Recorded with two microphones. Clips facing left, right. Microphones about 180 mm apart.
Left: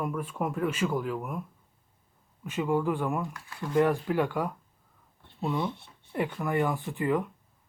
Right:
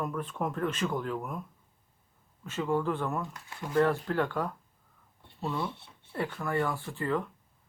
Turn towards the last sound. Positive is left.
turn(degrees=15)  # may be behind; listen again after turning